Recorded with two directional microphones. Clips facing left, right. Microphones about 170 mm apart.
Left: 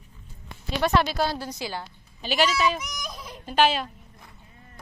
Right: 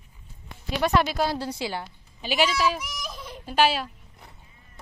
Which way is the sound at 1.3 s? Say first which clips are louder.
Right 3 dB; 30° right (ahead or behind).